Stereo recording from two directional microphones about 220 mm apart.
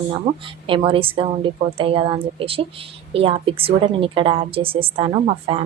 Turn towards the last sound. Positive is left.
turn(degrees=-25)  # may be behind; listen again after turning